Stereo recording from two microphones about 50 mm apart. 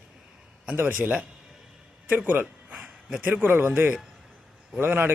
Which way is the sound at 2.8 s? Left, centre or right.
Centre.